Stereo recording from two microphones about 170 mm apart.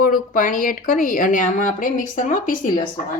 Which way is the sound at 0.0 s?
50° left (ahead or behind).